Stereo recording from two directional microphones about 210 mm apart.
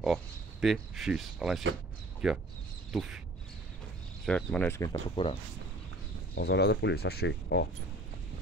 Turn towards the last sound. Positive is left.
turn(degrees=55)  # may be behind; listen again after turning